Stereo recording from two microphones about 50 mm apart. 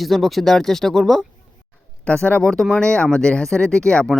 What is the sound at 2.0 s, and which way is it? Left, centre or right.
Speech, left.